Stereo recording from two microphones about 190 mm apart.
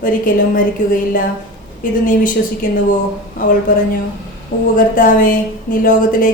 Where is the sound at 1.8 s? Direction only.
45° left (ahead or behind).